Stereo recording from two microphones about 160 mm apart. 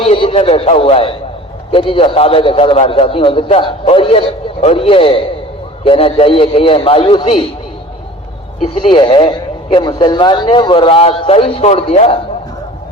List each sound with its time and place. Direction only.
0.0 s speech: 35° left (ahead or behind)
8.6 s speech: 35° left (ahead or behind)